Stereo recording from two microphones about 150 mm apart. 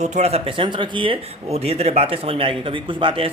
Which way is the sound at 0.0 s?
50° right (ahead or behind).